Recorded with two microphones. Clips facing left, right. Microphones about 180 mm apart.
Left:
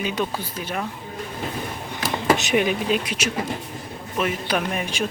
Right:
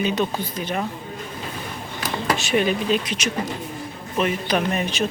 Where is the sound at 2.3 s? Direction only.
15° left (ahead or behind).